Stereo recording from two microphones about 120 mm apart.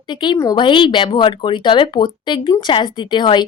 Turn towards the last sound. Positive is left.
turn(degrees=40)  # may be behind; listen again after turning